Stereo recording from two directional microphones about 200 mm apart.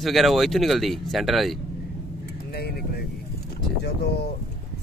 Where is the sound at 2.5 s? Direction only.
50° left (ahead or behind).